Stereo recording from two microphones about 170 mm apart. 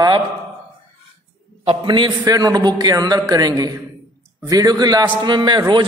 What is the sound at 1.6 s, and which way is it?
A man's voice, 30° right (ahead or behind).